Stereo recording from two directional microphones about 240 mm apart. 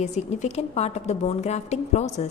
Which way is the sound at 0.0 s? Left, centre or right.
Left.